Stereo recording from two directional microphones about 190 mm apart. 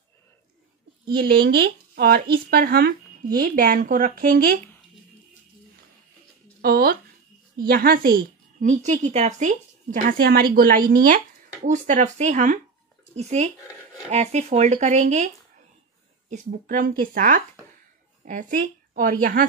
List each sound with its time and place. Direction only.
1.1 s a woman's voice: 50° right (ahead or behind)
6.6 s a woman's voice: 50° right (ahead or behind)